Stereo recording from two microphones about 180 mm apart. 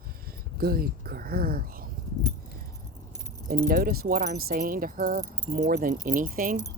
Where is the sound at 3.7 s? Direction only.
55° right (ahead or behind).